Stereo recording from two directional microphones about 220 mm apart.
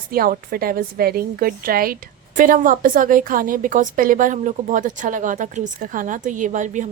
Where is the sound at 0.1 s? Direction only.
40° right (ahead or behind).